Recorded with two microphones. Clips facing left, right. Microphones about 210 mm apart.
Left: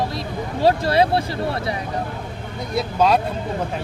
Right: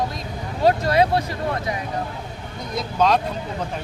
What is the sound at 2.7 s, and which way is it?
Speech, 5° left (ahead or behind).